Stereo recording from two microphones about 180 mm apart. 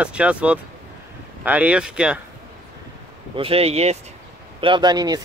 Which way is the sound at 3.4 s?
35° right (ahead or behind).